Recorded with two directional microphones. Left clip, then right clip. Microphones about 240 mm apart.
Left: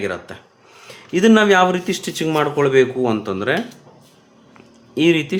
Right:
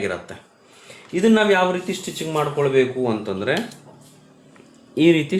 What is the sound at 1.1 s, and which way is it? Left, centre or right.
Speech, left.